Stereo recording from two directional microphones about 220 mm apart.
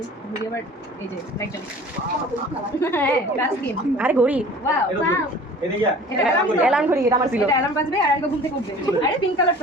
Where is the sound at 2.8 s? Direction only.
10° left (ahead or behind).